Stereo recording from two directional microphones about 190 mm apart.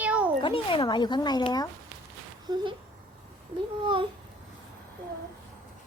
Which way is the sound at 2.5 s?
25° right (ahead or behind).